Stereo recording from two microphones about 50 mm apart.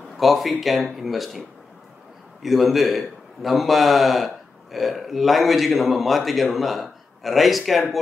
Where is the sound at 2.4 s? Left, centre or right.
Centre.